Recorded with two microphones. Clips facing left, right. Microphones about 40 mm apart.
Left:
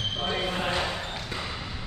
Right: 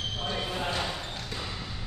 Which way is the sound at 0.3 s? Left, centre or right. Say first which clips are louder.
Left 3 dB; left.